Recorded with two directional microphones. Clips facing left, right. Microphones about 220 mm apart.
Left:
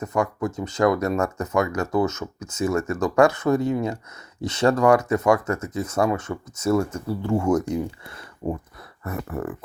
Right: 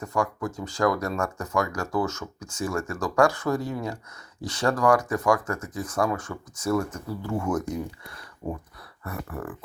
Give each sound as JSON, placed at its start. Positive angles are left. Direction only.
{"t": 0.0, "sound": "speech", "side_deg": 20}
{"t": 8.4, "sound": "speech", "side_deg": 35}
{"t": 9.0, "sound": "speech", "side_deg": 25}